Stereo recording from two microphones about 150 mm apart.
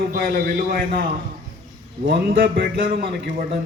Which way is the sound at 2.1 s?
90° right.